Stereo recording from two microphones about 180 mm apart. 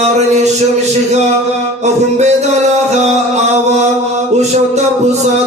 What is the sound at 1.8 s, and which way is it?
Music, 40° right (ahead or behind).